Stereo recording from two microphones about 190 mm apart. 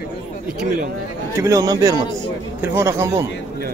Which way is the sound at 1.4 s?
20° right (ahead or behind).